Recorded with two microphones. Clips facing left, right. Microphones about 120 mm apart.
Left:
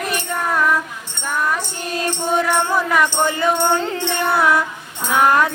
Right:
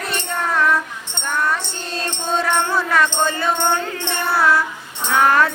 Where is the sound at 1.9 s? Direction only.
10° left (ahead or behind).